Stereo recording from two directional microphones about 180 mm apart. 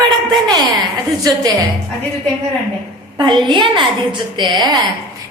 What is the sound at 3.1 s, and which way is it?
A woman's voice, 25° right (ahead or behind).